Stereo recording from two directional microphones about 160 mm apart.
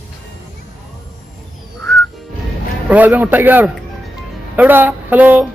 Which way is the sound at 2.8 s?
10° right (ahead or behind).